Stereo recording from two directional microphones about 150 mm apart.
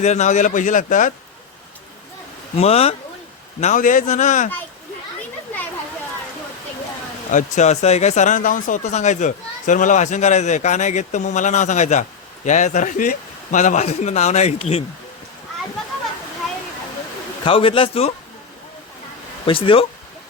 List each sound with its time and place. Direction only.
0.0 s speech: 50° left (ahead or behind)
2.6 s speech: 40° left (ahead or behind)
3.6 s speech: 55° left (ahead or behind)
7.3 s speech: 55° left (ahead or behind)
17.4 s a man's voice: 35° left (ahead or behind)
19.5 s a man's voice: 35° left (ahead or behind)